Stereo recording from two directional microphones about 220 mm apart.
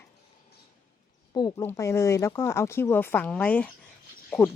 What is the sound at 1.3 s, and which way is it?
Speech, 20° left (ahead or behind).